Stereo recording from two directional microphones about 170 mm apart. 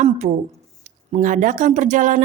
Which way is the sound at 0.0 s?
45° right (ahead or behind).